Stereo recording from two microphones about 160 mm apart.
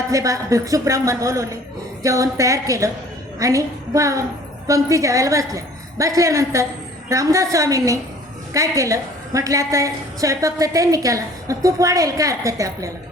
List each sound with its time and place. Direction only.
0.1 s a woman's voice: 20° right (ahead or behind)